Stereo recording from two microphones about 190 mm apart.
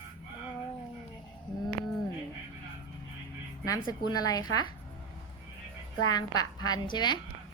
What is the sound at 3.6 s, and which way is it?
A woman's voice, 20° left (ahead or behind).